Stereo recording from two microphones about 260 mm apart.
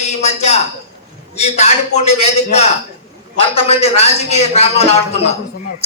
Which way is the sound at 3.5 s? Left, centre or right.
Left.